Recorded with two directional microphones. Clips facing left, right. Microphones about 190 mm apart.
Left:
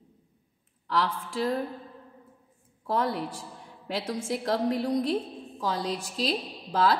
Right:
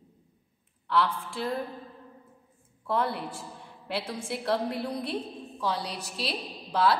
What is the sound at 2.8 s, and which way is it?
Speech, 40° left (ahead or behind).